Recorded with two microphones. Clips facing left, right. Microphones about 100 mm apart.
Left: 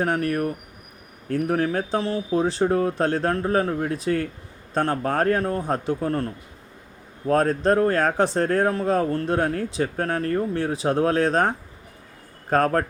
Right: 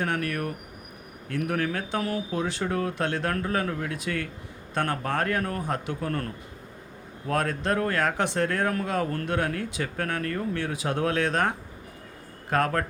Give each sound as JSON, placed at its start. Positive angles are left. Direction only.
{"t": 0.0, "sound": "speech", "side_deg": 35}
{"t": 7.3, "sound": "speech", "side_deg": 35}